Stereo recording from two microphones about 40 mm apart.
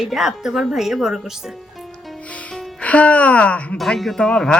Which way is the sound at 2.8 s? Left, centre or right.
Left.